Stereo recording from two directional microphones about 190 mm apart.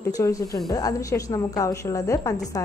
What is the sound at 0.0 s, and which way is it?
A woman's voice, 15° left (ahead or behind).